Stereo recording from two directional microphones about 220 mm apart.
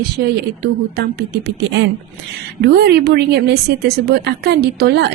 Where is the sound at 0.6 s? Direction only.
45° right (ahead or behind).